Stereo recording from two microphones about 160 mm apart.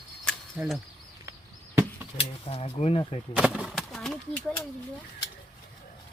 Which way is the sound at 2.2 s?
35° left (ahead or behind).